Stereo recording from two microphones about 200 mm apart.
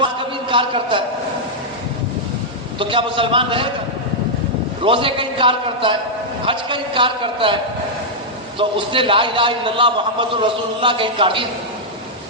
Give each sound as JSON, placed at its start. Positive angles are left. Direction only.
{"t": 0.5, "sound": "a man's voice", "side_deg": -25}
{"t": 2.7, "sound": "a man's voice", "side_deg": -25}
{"t": 4.8, "sound": "a man's voice", "side_deg": -25}